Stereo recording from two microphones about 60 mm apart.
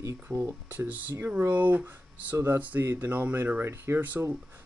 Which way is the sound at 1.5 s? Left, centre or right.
Right.